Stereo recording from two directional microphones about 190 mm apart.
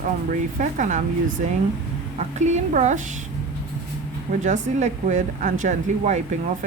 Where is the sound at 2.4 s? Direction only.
40° right (ahead or behind).